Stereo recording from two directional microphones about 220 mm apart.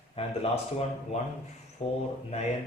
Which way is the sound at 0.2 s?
25° left (ahead or behind).